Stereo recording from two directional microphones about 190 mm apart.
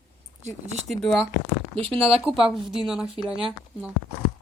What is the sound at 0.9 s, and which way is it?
Speech, centre (ahead or behind).